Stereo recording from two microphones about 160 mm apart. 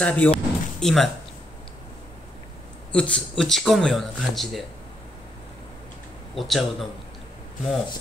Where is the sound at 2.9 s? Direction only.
5° left (ahead or behind).